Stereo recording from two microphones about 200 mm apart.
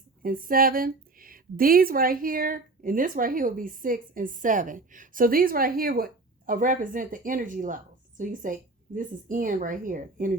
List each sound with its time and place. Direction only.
0.2 s a woman's voice: 45° right (ahead or behind)